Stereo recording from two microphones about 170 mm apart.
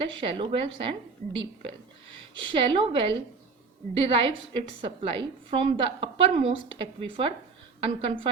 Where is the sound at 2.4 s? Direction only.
30° right (ahead or behind).